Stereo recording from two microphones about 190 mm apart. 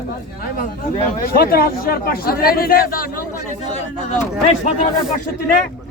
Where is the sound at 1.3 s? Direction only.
50° left (ahead or behind).